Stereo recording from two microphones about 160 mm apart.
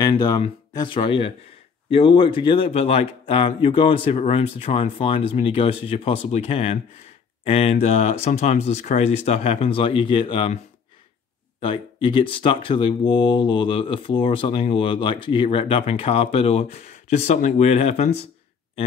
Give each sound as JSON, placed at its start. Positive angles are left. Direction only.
{"t": 0.1, "sound": "speech", "side_deg": 30}
{"t": 11.6, "sound": "speech", "side_deg": 30}